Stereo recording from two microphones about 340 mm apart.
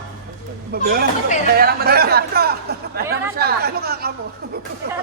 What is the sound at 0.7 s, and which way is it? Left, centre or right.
A man's voice, right.